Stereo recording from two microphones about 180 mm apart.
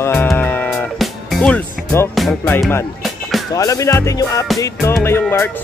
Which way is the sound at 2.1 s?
Centre (ahead or behind).